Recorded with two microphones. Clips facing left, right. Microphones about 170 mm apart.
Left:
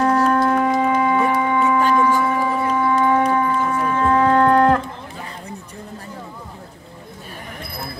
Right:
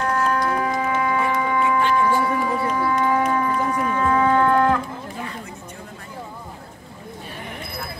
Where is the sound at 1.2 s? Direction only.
40° left (ahead or behind).